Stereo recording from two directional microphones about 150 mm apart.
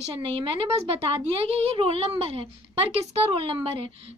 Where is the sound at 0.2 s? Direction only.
35° right (ahead or behind).